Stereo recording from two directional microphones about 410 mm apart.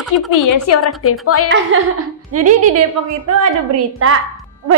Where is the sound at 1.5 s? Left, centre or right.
Right.